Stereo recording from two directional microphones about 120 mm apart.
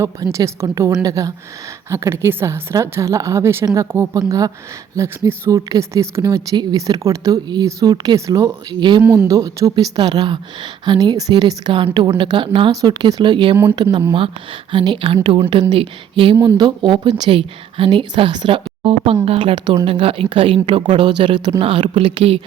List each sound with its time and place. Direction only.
0.0 s speech: 25° right (ahead or behind)
9.0 s a woman's voice: 25° right (ahead or behind); by 22.4 s 50° right (ahead or behind)